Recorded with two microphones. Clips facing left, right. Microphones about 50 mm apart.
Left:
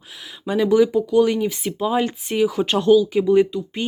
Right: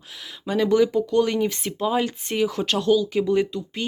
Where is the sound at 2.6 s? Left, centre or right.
Centre.